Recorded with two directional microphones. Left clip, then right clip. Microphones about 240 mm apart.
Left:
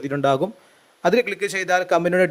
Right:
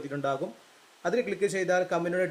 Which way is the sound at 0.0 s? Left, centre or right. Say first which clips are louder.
Left 11 dB; left.